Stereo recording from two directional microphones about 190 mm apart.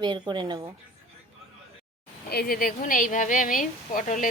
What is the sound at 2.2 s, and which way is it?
A woman's voice, 55° left (ahead or behind).